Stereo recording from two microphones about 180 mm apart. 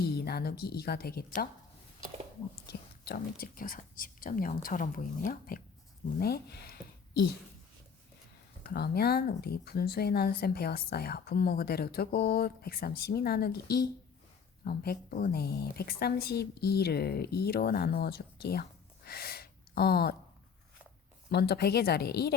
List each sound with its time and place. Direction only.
0.0 s speech: 60° left (ahead or behind)
2.6 s speech: 60° left (ahead or behind)
6.1 s speech: 60° left (ahead or behind)
8.7 s speech: 60° left (ahead or behind)
19.0 s a sound: 60° left (ahead or behind)
21.2 s speech: 65° left (ahead or behind)